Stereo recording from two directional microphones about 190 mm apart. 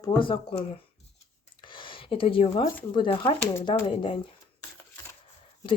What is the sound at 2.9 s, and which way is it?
Speech, 25° left (ahead or behind).